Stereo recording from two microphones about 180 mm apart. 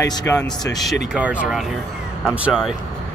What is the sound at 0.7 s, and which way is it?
Speech, centre (ahead or behind).